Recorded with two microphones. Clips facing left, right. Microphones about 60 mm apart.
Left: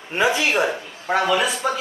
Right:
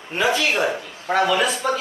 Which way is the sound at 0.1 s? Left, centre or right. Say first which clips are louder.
Left 1 dB; left.